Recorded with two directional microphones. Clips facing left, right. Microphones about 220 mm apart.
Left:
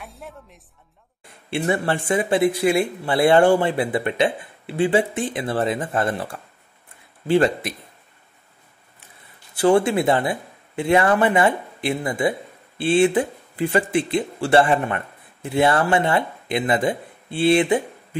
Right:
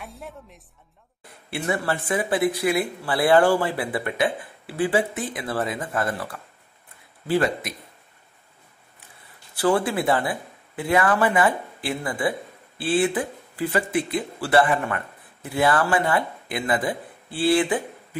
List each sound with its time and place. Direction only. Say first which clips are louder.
0.0 s speech: even; centre (ahead or behind)
1.5 s speech: left 4 dB; 25° left (ahead or behind)
9.6 s speech: left 5 dB; 25° left (ahead or behind)